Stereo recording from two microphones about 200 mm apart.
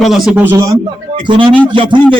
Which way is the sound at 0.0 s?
Centre (ahead or behind).